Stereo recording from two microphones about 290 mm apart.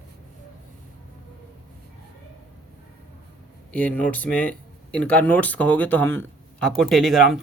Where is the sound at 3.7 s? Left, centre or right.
Centre.